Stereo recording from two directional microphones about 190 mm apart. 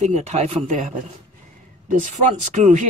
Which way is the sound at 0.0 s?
35° right (ahead or behind).